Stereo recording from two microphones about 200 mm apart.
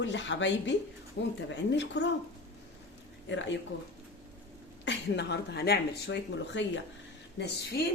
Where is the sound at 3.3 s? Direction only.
65° left (ahead or behind).